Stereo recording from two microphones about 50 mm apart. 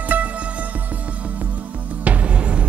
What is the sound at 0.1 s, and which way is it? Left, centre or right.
Music, right.